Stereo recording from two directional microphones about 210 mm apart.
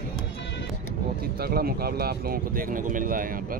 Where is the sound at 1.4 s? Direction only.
45° right (ahead or behind).